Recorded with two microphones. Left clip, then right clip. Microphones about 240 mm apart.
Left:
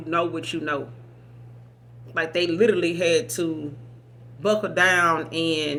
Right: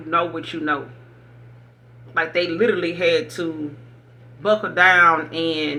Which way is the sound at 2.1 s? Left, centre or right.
Left.